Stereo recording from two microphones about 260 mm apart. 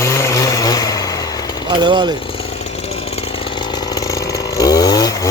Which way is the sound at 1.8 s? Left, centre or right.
Centre.